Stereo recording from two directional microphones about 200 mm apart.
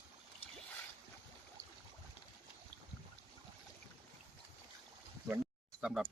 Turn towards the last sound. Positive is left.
turn(degrees=-5)  # may be behind; listen again after turning